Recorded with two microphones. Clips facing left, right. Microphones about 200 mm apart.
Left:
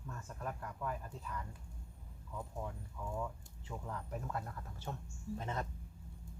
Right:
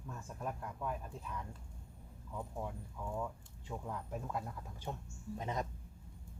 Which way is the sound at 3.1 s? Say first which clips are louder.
Right 1 dB; 5° right (ahead or behind).